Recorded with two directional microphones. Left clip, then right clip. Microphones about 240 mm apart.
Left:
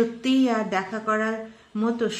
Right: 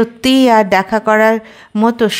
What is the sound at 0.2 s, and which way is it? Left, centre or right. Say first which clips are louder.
Speech: right 14 dB; right.